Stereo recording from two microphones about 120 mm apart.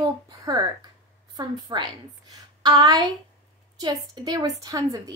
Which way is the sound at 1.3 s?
35° right (ahead or behind).